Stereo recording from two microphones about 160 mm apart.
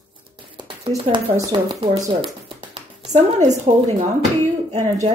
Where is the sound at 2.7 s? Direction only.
40° right (ahead or behind).